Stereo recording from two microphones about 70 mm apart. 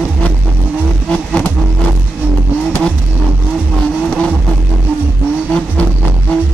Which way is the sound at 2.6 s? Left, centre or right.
Centre.